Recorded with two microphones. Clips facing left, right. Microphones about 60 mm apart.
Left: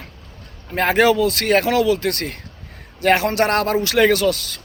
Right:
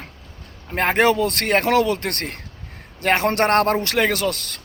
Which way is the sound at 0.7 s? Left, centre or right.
Right.